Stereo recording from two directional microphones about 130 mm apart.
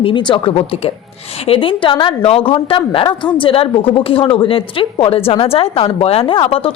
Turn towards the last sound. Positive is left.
turn(degrees=45)  # may be behind; listen again after turning